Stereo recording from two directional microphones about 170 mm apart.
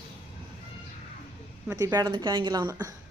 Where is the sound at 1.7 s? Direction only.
20° right (ahead or behind).